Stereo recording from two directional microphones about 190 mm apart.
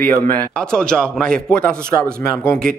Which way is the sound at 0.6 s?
5° left (ahead or behind).